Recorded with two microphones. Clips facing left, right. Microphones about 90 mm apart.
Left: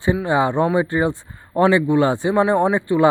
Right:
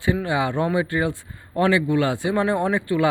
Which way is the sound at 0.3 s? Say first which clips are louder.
Left 5 dB; 30° left (ahead or behind).